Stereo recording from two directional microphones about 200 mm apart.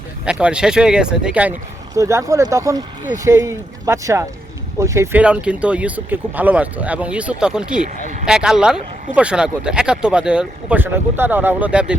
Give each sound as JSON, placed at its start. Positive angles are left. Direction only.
{"t": 0.3, "sound": "speech", "side_deg": -5}
{"t": 7.8, "sound": "speech", "side_deg": -40}
{"t": 8.3, "sound": "speech", "side_deg": -5}